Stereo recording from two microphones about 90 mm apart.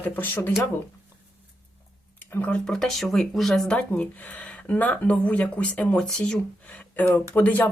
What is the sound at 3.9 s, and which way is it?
Speech, 15° left (ahead or behind).